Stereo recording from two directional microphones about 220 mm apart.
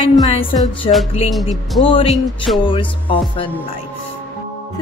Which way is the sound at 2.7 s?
25° left (ahead or behind).